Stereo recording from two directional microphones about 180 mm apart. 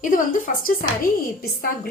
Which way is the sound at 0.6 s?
50° left (ahead or behind).